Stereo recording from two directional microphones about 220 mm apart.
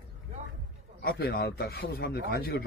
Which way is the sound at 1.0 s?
45° left (ahead or behind).